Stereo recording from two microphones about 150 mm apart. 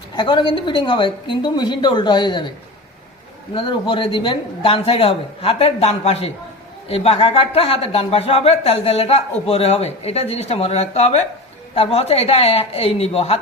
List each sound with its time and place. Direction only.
0.2 s speech: 30° left (ahead or behind)
3.5 s speech: 35° left (ahead or behind)